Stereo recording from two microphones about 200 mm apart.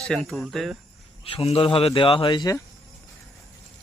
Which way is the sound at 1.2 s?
30° left (ahead or behind).